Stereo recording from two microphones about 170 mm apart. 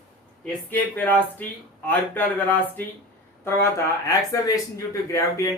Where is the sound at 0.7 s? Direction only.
10° left (ahead or behind).